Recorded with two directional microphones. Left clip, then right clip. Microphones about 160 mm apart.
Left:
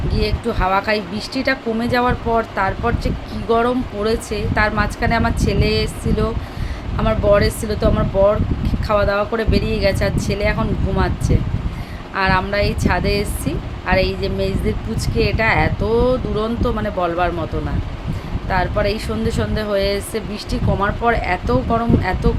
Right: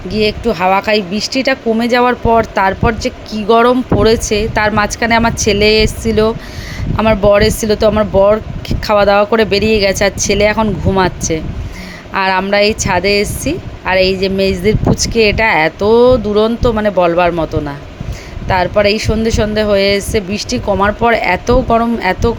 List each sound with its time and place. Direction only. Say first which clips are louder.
0.1 s speech: right 9 dB; 45° right (ahead or behind)
18.4 s speech: right 8 dB; 50° right (ahead or behind)